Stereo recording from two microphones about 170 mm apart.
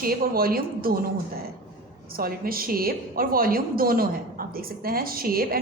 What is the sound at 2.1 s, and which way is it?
A woman's voice, 60° right (ahead or behind).